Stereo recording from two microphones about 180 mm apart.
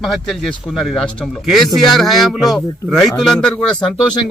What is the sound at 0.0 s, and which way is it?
Speech, centre (ahead or behind).